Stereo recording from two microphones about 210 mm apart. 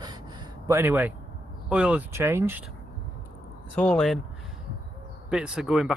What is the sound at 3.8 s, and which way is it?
Speech, 5° left (ahead or behind).